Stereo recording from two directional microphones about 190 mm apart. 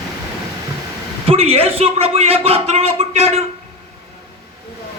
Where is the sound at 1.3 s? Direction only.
30° right (ahead or behind).